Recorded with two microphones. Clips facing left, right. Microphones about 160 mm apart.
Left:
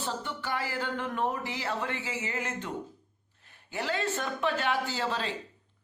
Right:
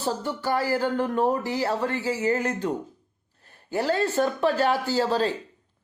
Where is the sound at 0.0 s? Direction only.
40° right (ahead or behind).